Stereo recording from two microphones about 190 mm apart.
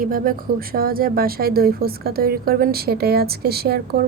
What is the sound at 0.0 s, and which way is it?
A woman's voice, 50° right (ahead or behind).